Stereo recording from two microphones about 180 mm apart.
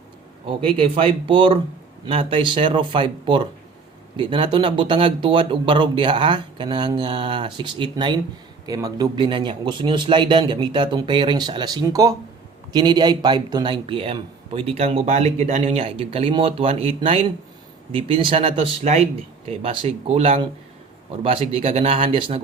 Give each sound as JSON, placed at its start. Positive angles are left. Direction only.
{"t": 0.4, "sound": "speech", "side_deg": -30}